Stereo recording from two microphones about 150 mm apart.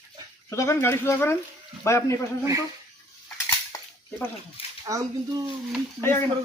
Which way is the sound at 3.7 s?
25° left (ahead or behind).